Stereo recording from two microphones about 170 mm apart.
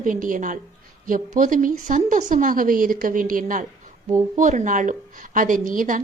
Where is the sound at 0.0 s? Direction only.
50° right (ahead or behind).